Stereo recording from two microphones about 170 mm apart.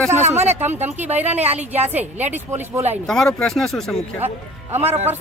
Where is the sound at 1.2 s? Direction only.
40° right (ahead or behind).